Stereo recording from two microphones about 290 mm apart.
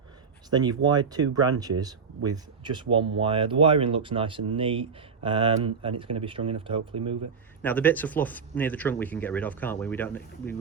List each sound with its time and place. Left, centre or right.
0.5 s speech: centre
7.6 s speech: centre